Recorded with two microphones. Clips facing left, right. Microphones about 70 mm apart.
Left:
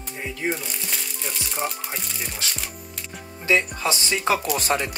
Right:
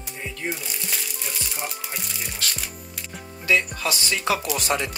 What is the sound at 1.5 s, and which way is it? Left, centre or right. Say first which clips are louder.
Music: left 4 dB; centre.